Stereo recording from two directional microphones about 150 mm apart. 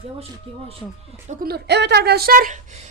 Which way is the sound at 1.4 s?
90° right.